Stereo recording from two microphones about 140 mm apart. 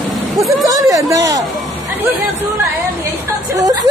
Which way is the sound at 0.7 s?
25° right (ahead or behind).